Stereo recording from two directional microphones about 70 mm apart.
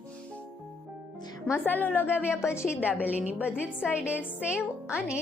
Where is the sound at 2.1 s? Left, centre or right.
Centre.